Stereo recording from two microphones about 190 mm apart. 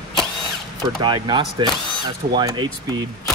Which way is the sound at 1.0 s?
25° right (ahead or behind).